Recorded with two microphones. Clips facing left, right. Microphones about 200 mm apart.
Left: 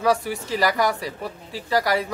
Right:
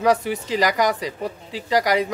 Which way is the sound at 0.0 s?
20° right (ahead or behind).